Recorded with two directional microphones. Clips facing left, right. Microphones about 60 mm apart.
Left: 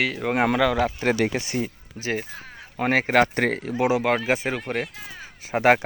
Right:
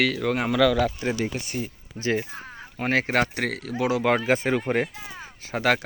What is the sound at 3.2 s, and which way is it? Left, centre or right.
Speech, left.